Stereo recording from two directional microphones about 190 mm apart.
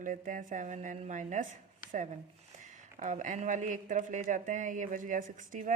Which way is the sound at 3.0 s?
40° right (ahead or behind).